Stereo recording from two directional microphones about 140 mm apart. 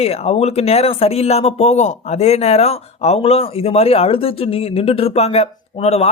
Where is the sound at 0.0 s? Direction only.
45° left (ahead or behind).